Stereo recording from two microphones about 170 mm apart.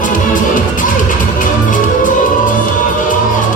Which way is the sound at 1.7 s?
50° left (ahead or behind).